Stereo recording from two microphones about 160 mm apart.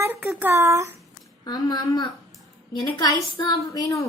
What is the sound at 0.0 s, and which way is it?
Speech, 15° right (ahead or behind).